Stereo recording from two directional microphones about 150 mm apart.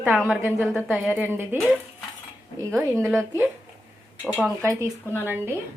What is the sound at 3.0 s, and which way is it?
Speech, 15° right (ahead or behind).